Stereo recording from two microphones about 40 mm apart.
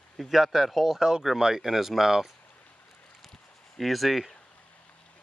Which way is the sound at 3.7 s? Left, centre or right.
Centre.